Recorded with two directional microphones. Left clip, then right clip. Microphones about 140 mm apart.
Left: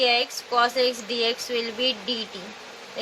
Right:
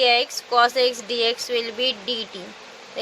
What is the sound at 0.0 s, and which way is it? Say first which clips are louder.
A child's voice: right 3 dB; 90° right.